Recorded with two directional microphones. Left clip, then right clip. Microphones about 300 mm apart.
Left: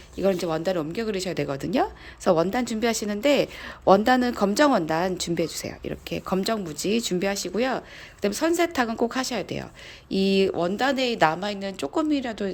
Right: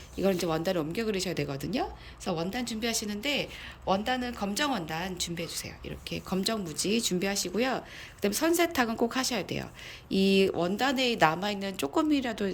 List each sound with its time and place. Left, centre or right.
0.2 s speech: centre